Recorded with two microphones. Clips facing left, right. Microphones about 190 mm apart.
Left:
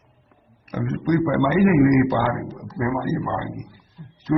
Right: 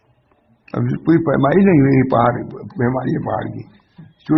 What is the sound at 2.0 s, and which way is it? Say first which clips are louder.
Speech: right 6 dB; 75° right (ahead or behind).